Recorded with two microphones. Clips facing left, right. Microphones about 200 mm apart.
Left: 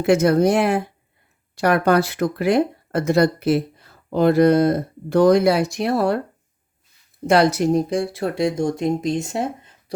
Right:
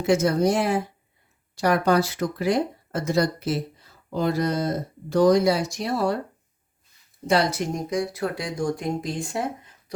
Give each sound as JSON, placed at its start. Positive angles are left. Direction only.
{"t": 0.0, "sound": "speech", "side_deg": 60}
{"t": 7.5, "sound": "speech", "side_deg": 35}